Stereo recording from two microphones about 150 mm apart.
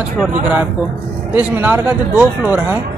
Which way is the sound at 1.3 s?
10° right (ahead or behind).